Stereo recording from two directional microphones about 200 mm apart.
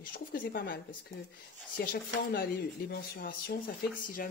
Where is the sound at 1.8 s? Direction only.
45° left (ahead or behind).